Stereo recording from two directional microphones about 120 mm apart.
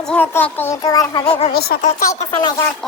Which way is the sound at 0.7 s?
30° left (ahead or behind).